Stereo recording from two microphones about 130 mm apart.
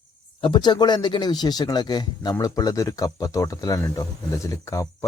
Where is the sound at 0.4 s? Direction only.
40° left (ahead or behind).